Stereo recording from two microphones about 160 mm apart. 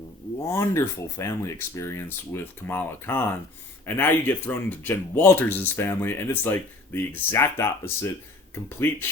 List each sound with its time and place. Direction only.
0.4 s speech: 15° left (ahead or behind)